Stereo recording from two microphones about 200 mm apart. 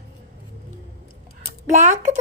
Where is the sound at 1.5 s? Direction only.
35° right (ahead or behind).